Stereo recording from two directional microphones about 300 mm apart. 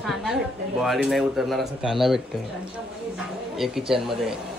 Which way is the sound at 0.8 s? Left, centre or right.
Centre.